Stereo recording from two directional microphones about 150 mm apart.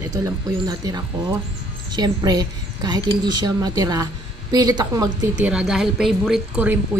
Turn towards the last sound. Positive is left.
turn(degrees=-5)  # may be behind; listen again after turning